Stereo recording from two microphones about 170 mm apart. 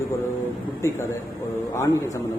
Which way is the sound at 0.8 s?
20° left (ahead or behind).